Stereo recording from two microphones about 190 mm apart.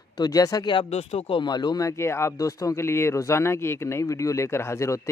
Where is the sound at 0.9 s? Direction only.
35° left (ahead or behind).